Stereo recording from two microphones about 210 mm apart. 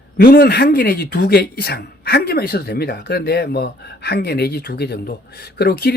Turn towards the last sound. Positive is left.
turn(degrees=50)  # may be behind; listen again after turning